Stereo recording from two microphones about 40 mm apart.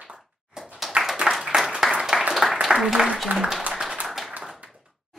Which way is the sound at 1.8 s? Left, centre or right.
Centre.